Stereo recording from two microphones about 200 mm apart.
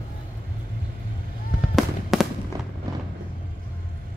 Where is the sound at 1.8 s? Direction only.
Centre (ahead or behind).